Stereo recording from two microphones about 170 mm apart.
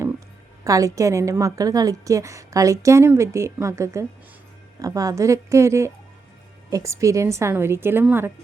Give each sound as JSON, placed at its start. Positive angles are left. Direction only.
{"t": 0.6, "sound": "a woman's voice", "side_deg": -20}